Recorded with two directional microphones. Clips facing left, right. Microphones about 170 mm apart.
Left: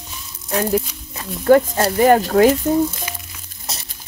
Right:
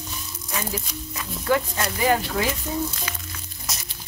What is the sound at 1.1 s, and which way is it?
Speech, 40° left (ahead or behind).